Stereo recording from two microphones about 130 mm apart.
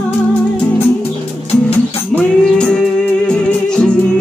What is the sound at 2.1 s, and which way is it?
Music, 5° left (ahead or behind).